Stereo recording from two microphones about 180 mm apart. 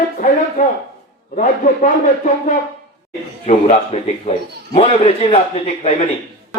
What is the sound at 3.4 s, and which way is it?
A man's voice, 35° left (ahead or behind).